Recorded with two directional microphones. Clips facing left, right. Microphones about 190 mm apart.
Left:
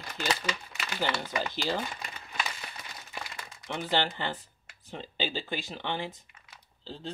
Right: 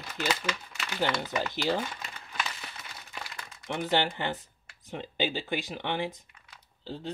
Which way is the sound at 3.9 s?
15° right (ahead or behind).